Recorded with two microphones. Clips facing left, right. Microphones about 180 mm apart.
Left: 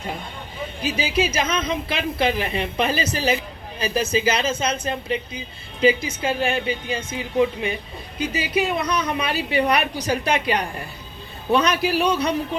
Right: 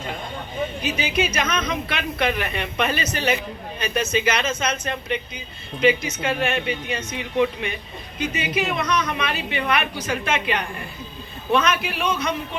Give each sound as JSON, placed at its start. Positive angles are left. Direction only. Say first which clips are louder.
{"t": 0.8, "sound": "a woman's voice", "louder": "left 3 dB", "side_deg": 35}